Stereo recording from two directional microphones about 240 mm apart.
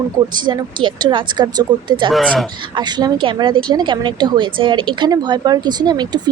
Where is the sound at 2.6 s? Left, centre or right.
Centre.